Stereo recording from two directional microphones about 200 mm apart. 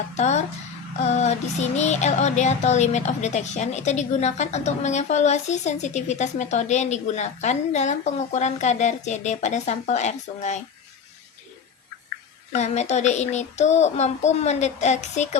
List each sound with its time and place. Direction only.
0.1 s child singing: 35° left (ahead or behind)
12.5 s child singing: 35° left (ahead or behind)